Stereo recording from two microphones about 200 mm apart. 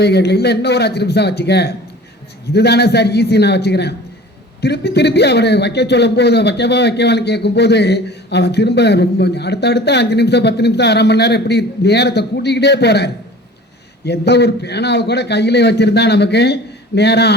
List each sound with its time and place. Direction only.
0.0 s speech: 55° left (ahead or behind)